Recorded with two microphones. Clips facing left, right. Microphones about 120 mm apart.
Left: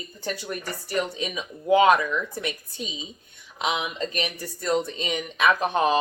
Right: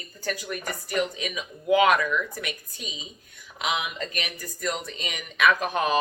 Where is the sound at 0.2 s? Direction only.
30° left (ahead or behind).